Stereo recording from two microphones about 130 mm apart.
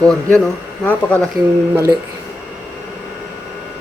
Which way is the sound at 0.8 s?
10° left (ahead or behind).